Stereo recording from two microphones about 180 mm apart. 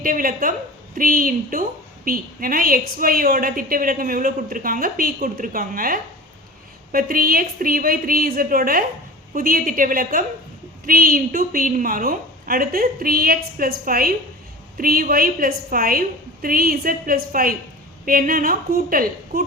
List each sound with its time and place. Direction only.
0.0 s a woman's voice: 50° right (ahead or behind)